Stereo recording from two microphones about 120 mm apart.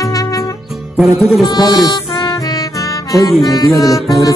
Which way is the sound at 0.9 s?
Centre (ahead or behind).